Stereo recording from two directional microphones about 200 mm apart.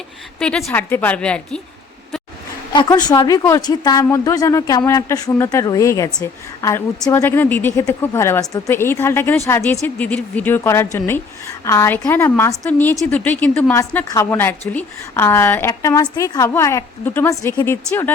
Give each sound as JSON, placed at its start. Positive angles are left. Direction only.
{"t": 0.3, "sound": "a woman's voice", "side_deg": 5}
{"t": 2.7, "sound": "speech", "side_deg": 20}